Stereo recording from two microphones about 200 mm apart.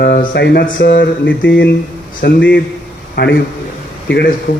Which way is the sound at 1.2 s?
65° left (ahead or behind).